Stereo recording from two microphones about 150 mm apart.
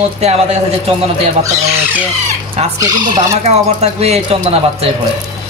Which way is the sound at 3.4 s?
45° right (ahead or behind).